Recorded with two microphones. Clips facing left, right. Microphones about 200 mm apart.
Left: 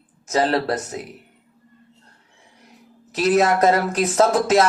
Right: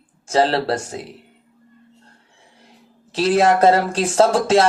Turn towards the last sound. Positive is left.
turn(degrees=-30)  # may be behind; listen again after turning